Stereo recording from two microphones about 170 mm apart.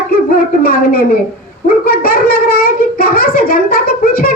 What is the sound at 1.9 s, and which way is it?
A child's voice, 60° left (ahead or behind).